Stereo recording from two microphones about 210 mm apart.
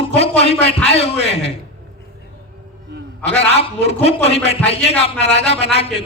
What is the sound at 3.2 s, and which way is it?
A man's voice, 30° left (ahead or behind).